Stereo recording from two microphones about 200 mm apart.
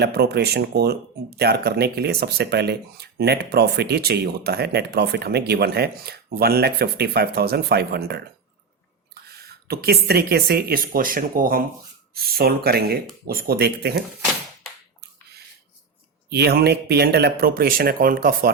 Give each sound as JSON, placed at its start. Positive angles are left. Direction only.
{"t": 0.0, "sound": "speech", "side_deg": -55}
{"t": 9.6, "sound": "speech", "side_deg": -50}
{"t": 16.3, "sound": "speech", "side_deg": -55}